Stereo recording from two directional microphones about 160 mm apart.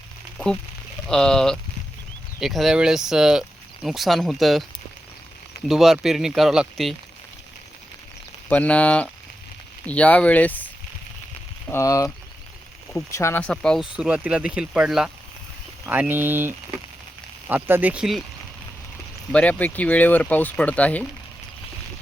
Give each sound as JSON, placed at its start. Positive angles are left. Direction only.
{"t": 0.3, "sound": "speech", "side_deg": 5}
{"t": 5.6, "sound": "speech", "side_deg": 0}
{"t": 8.4, "sound": "speech", "side_deg": 10}
{"t": 11.7, "sound": "speech", "side_deg": 20}
{"t": 13.9, "sound": "speech", "side_deg": -5}
{"t": 19.3, "sound": "speech", "side_deg": 10}